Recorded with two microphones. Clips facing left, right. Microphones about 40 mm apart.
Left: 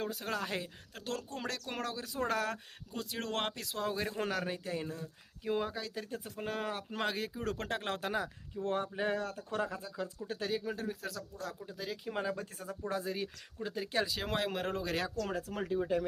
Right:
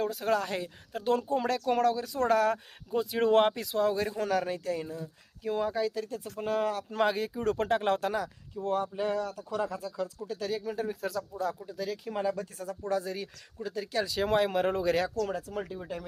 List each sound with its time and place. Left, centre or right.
0.0 s speech: centre
1.0 s speech: centre
1.4 s speech: centre
2.9 s speech: centre
8.6 s speech: left
9.0 s speech: left
10.8 s speech: centre
11.8 s speech: centre
13.6 s speech: left
14.2 s speech: centre
15.5 s speech: left
15.8 s speech: centre